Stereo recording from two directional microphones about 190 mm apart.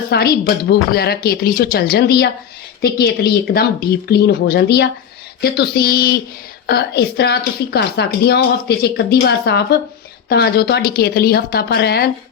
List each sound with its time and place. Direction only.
0.1 s a woman's voice: 55° left (ahead or behind)